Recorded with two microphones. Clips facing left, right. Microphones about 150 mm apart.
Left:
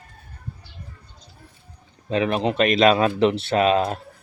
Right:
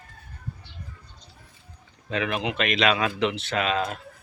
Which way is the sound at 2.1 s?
35° left (ahead or behind).